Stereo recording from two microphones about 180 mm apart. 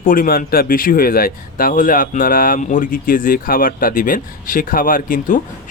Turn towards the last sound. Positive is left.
turn(degrees=50)  # may be behind; listen again after turning